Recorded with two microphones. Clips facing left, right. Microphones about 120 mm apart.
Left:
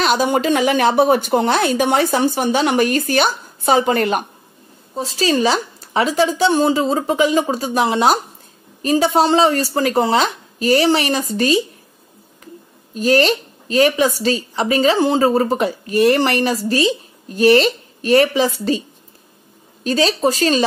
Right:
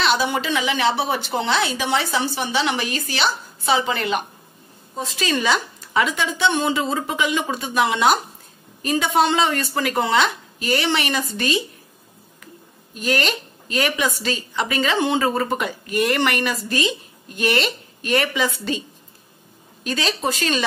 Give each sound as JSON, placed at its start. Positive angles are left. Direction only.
{"t": 0.0, "sound": "speech", "side_deg": 45}
{"t": 4.9, "sound": "a woman's voice", "side_deg": 35}
{"t": 12.9, "sound": "a woman's voice", "side_deg": 35}
{"t": 19.8, "sound": "a woman's voice", "side_deg": 35}